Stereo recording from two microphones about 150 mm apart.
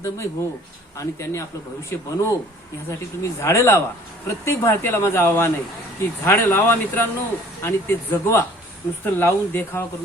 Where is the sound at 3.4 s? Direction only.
20° left (ahead or behind).